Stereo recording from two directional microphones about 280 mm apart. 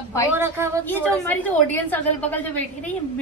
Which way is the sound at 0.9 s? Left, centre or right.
Centre.